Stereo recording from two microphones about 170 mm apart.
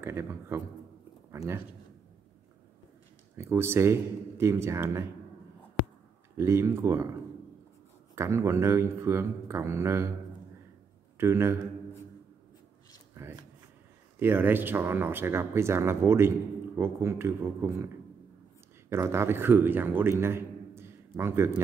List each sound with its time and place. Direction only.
0.0 s speech: 15° right (ahead or behind)
3.3 s speech: 15° right (ahead or behind)
6.3 s speech: 15° right (ahead or behind)
8.1 s speech: 15° right (ahead or behind)
11.1 s speech: 15° right (ahead or behind)
14.2 s a man's voice: 10° right (ahead or behind)